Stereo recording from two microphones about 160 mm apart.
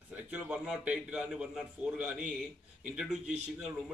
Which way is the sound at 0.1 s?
10° right (ahead or behind).